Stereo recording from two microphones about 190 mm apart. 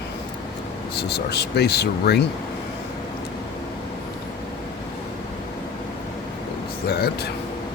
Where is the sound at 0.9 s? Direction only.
60° left (ahead or behind).